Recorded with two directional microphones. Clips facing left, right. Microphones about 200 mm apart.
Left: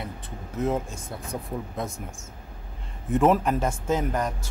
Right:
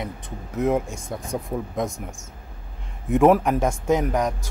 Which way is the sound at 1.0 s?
45° right (ahead or behind).